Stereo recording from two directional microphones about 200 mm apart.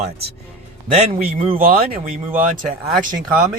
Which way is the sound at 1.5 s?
45° right (ahead or behind).